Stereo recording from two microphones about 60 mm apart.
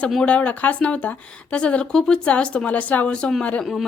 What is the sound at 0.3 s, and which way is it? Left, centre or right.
Speech, left.